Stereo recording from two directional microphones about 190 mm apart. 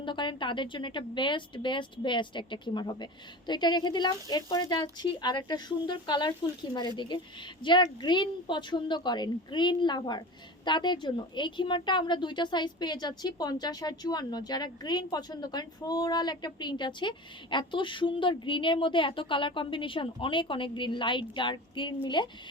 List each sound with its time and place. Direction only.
0.0 s a woman's voice: 25° left (ahead or behind)